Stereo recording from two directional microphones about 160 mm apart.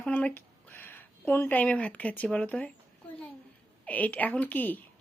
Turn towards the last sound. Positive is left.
turn(degrees=10)  # may be behind; listen again after turning